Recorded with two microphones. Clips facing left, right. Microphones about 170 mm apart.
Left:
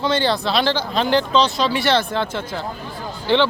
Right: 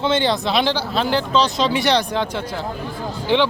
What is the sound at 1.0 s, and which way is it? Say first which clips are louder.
Speech: left 2 dB; 5° right (ahead or behind).